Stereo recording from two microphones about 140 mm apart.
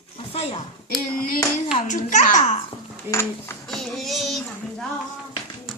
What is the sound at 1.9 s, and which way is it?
Babbling, 65° left (ahead or behind).